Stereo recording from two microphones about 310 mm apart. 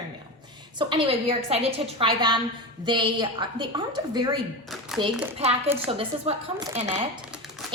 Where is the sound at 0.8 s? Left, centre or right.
Centre.